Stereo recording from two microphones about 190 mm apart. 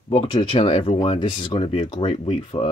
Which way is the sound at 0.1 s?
30° left (ahead or behind).